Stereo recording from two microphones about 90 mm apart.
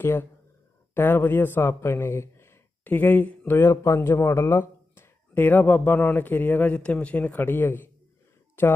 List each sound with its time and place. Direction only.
0.0 s speech: 25° left (ahead or behind)
3.7 s speech: 35° left (ahead or behind)